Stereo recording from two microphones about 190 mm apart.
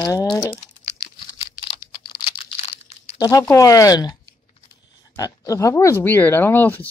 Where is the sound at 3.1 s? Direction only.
20° left (ahead or behind).